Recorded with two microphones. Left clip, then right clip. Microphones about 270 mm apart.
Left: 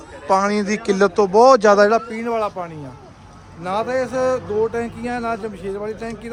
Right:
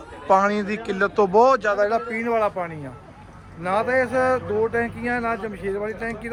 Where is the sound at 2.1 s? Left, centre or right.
Centre.